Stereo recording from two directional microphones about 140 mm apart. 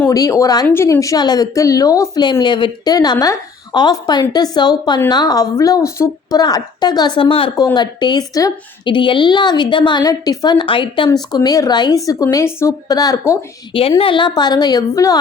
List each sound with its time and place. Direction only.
0.1 s a woman's voice: 25° left (ahead or behind); by 7.5 s 40° left (ahead or behind)
7.5 s a woman's voice: 25° left (ahead or behind)
14.0 s a woman's voice: 35° left (ahead or behind)